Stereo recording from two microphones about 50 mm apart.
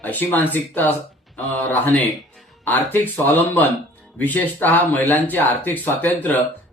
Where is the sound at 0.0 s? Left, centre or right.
Left.